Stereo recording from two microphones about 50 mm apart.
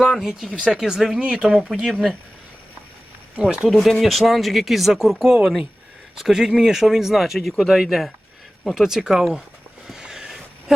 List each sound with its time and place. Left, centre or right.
0.0 s speech: centre
1.2 s speech: right
1.7 s speech: centre
3.4 s speech: right
4.0 s speech: centre
9.8 s a sound: centre